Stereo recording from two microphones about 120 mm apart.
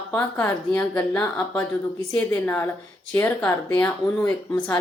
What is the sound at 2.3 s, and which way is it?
Speech, 20° left (ahead or behind).